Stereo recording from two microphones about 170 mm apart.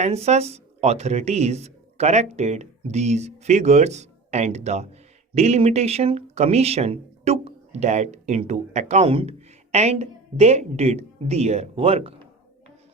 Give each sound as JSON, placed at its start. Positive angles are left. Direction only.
{"t": 0.0, "sound": "speech", "side_deg": -40}